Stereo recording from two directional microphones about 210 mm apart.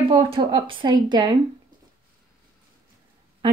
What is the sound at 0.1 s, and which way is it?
Speech, 25° right (ahead or behind).